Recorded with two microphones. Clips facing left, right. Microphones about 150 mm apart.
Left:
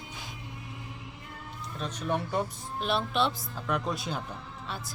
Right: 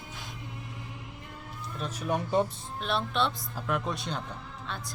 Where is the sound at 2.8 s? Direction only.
Centre (ahead or behind).